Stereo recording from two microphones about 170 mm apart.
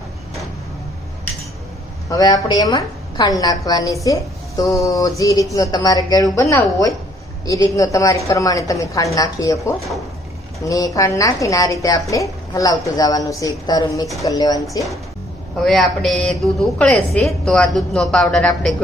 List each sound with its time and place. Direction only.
2.0 s a woman's voice: 20° left (ahead or behind)
15.6 s a woman's voice: centre (ahead or behind)